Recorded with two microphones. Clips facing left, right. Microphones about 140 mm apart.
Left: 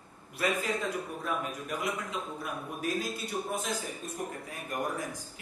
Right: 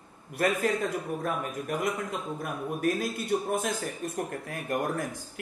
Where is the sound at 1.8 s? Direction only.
50° right (ahead or behind).